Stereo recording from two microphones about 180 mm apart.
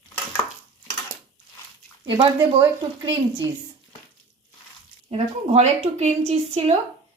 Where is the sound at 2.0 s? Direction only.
30° right (ahead or behind).